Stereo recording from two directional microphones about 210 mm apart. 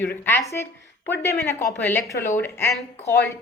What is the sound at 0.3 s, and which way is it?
A woman's voice, 10° left (ahead or behind).